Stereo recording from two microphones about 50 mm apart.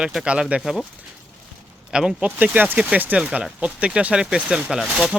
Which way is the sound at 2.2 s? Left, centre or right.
Right.